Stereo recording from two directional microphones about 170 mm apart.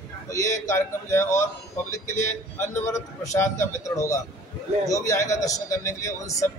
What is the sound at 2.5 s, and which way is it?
A man's voice, 15° left (ahead or behind).